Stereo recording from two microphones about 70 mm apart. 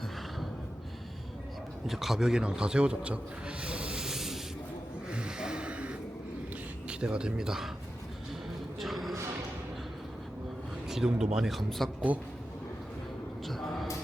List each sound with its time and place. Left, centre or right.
1.9 s a man's voice: centre
5.1 s snort: centre
6.8 s speech: centre
8.8 s music: centre
10.8 s speech: centre
12.1 s a man's voice: right
13.5 s a sound: centre